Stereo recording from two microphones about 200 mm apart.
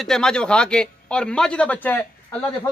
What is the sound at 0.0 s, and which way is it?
A man's voice, 5° left (ahead or behind).